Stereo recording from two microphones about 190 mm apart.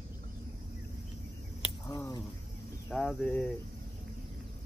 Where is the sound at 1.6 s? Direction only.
20° left (ahead or behind).